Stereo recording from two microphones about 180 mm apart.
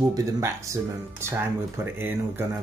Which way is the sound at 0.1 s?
15° right (ahead or behind).